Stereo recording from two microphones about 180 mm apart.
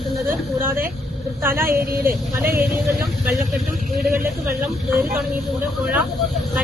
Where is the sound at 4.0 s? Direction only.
55° right (ahead or behind).